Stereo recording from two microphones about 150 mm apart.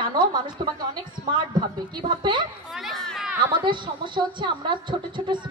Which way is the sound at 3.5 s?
30° right (ahead or behind).